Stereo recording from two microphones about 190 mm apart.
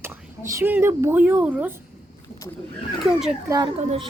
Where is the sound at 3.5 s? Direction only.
20° right (ahead or behind).